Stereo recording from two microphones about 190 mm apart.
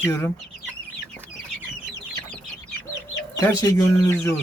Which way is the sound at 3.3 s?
20° left (ahead or behind).